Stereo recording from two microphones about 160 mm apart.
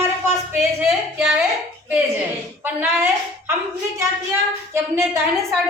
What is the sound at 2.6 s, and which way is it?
Speech, 10° right (ahead or behind).